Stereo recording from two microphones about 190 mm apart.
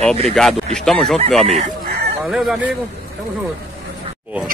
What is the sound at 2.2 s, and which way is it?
Speech, centre (ahead or behind).